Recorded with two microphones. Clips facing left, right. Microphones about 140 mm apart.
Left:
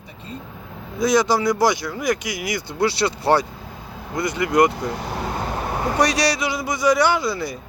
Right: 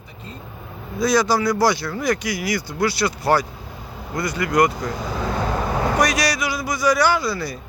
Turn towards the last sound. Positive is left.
turn(degrees=20)  # may be behind; listen again after turning